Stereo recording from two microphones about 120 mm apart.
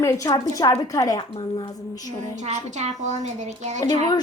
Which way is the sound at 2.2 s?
75° right (ahead or behind).